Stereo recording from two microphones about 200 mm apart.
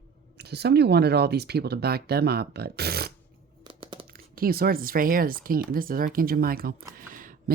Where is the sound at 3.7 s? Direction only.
25° right (ahead or behind).